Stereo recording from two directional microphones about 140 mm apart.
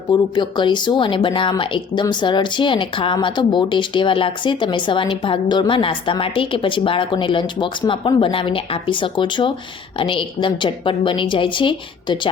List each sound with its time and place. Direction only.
0.1 s speech: 30° left (ahead or behind)